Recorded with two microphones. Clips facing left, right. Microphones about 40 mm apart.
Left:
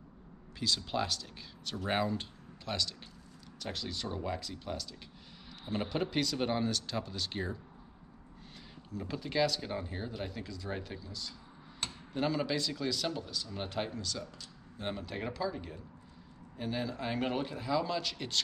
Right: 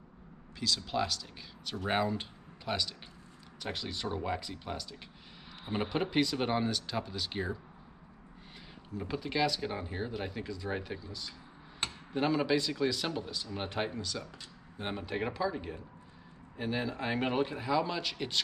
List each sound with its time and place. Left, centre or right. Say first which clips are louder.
0.6 s speech: right 1 dB; centre
8.9 s speech: even; centre